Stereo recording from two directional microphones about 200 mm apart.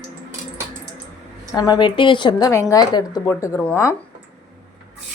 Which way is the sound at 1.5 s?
20° left (ahead or behind).